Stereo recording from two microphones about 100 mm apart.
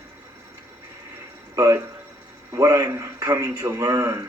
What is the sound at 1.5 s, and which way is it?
Speech, 30° right (ahead or behind).